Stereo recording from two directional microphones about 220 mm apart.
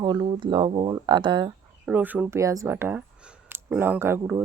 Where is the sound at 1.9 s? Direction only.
5° right (ahead or behind).